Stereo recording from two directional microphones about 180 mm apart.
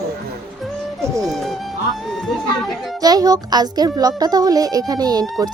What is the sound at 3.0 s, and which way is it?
Speech, 20° right (ahead or behind).